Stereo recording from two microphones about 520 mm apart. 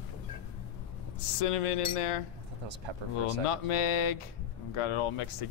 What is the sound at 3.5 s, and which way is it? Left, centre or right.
Speech, left.